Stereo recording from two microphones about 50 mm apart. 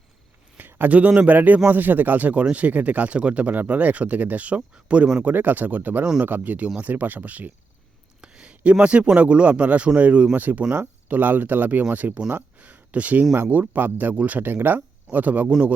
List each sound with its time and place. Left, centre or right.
0.8 s speech: right
5.2 s speech: right
8.2 s a sound: centre
8.8 s speech: right
12.3 s a sound: right
13.4 s speech: right